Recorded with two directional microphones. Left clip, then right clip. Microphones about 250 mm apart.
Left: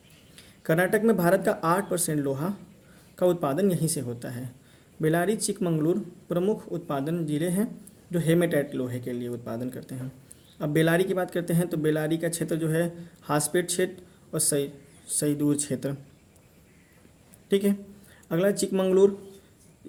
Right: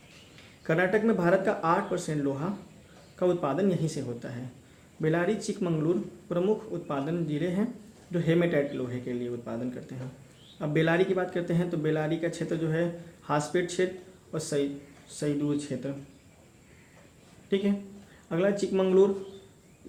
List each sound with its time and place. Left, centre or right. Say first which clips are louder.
0.7 s speech: left 2 dB; left
17.5 s speech: left 4 dB; left